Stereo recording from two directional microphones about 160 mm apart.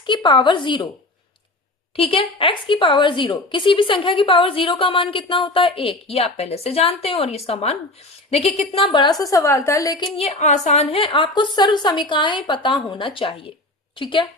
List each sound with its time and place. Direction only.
0.0 s a woman's voice: 30° left (ahead or behind)
2.0 s a woman's voice: 35° left (ahead or behind)
10.2 s a woman's voice: 45° left (ahead or behind)